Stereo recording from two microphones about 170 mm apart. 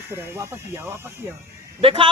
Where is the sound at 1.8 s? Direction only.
35° right (ahead or behind).